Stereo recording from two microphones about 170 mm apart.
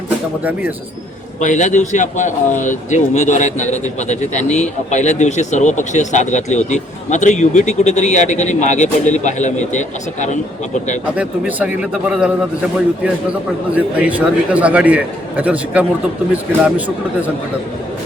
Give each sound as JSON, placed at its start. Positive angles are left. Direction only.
{"t": 1.4, "sound": "speech", "side_deg": 45}
{"t": 11.2, "sound": "a man's voice", "side_deg": -10}
{"t": 13.7, "sound": "a man's voice", "side_deg": -10}